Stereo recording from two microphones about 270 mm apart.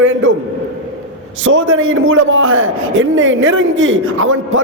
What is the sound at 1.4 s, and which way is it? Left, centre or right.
A man's voice, right.